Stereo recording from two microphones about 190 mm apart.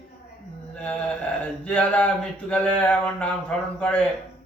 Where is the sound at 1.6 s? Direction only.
5° left (ahead or behind).